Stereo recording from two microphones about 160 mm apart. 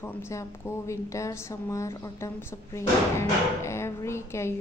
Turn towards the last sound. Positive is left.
turn(degrees=15)  # may be behind; listen again after turning